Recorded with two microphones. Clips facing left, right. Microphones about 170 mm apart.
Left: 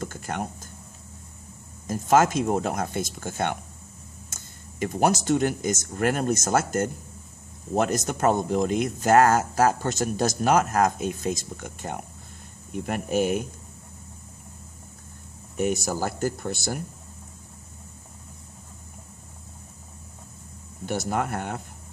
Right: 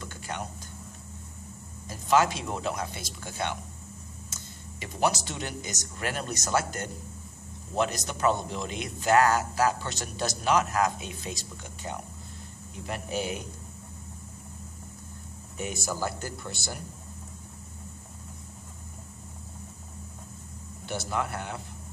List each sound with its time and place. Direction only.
0.0 s a sound: 45° left (ahead or behind)
1.9 s speech: 45° left (ahead or behind)
15.5 s speech: 45° left (ahead or behind)
21.1 s speech: 50° left (ahead or behind)